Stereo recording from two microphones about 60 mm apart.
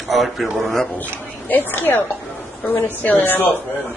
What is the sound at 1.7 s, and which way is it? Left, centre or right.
Speech, left.